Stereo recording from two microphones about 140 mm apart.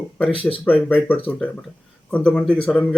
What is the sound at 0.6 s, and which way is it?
A man's voice, 10° left (ahead or behind).